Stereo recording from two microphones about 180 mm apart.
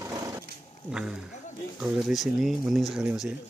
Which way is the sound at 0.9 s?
5° right (ahead or behind).